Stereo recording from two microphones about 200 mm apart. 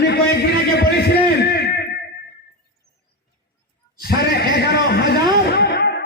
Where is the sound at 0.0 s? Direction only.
55° left (ahead or behind).